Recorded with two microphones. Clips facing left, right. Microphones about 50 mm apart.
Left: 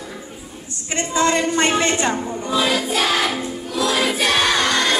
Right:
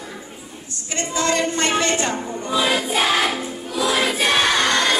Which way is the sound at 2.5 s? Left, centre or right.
Centre.